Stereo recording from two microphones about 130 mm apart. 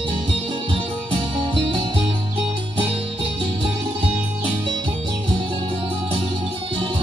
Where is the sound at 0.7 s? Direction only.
45° right (ahead or behind).